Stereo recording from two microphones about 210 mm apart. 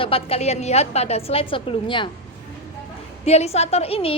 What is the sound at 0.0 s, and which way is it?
A woman's voice, 25° left (ahead or behind).